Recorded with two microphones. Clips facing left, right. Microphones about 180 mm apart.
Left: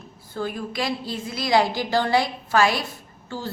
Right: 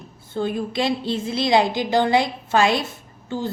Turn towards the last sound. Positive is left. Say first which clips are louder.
# right 5 dB
turn(degrees=-20)  # may be behind; listen again after turning